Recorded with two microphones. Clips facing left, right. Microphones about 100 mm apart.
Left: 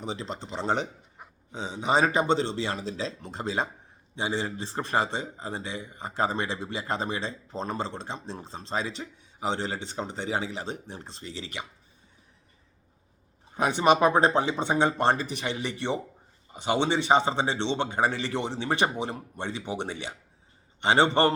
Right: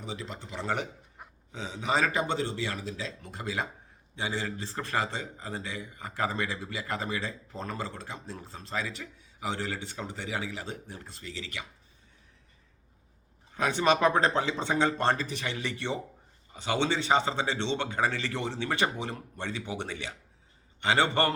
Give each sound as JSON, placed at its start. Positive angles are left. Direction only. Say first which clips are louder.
{"t": 0.0, "sound": "a man's voice", "louder": "left 5 dB", "side_deg": 30}
{"t": 13.5, "sound": "a man's voice", "louder": "left 4 dB", "side_deg": 20}